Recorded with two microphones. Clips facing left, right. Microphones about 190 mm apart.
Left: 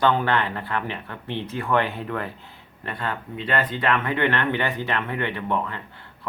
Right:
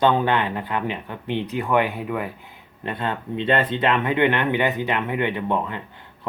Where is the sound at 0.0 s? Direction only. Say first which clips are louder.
Right 2 dB; 20° right (ahead or behind).